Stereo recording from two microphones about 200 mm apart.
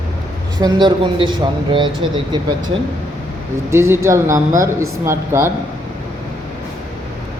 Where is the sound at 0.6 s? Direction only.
25° right (ahead or behind).